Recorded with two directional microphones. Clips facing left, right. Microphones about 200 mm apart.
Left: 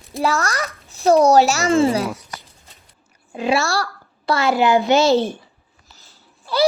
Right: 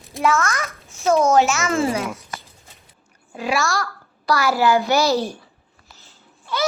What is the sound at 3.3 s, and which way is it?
A woman's voice, 25° left (ahead or behind).